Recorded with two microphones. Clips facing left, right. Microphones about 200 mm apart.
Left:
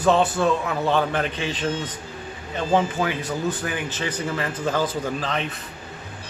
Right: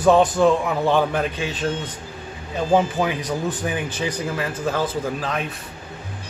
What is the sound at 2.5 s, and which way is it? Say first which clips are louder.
Speech: right 3 dB; 15° right (ahead or behind).